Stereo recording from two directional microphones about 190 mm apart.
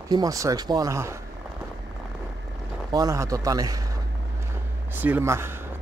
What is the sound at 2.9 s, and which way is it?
Speech, 20° right (ahead or behind).